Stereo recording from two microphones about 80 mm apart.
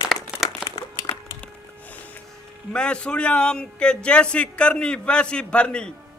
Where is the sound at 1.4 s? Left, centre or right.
Centre.